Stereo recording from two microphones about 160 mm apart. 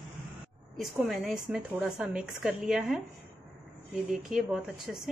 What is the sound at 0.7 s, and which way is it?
Speech, centre (ahead or behind).